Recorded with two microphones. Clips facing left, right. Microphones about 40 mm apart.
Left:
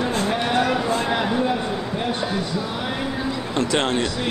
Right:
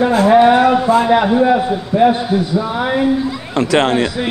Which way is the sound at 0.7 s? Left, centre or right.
Centre.